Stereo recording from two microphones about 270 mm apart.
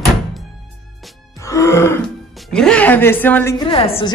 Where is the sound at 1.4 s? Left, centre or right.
Centre.